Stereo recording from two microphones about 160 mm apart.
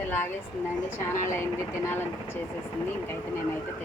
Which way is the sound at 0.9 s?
15° left (ahead or behind).